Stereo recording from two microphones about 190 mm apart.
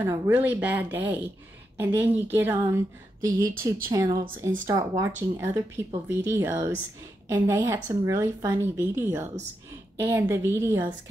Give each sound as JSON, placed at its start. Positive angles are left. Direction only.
{"t": 0.0, "sound": "a woman's voice", "side_deg": -10}